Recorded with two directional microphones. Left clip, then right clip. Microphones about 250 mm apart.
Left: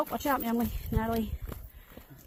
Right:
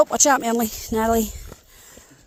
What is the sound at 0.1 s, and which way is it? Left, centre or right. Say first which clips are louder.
Speech: right 12 dB; right.